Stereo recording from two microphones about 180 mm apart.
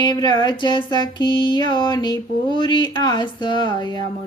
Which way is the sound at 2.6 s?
25° left (ahead or behind).